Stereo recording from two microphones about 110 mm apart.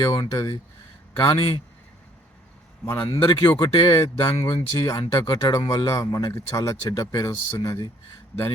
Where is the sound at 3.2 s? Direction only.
35° left (ahead or behind).